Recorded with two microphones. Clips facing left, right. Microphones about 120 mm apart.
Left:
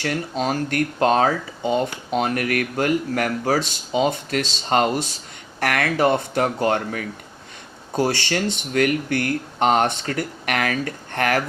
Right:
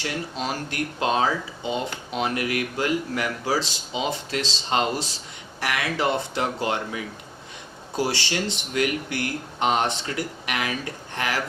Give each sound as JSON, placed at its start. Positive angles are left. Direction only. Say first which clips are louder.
{"t": 0.0, "sound": "speech", "louder": "left 5 dB", "side_deg": 50}